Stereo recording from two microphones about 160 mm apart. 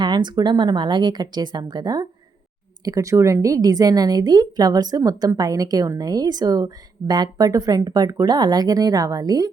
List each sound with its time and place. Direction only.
0.0 s speech: 30° right (ahead or behind)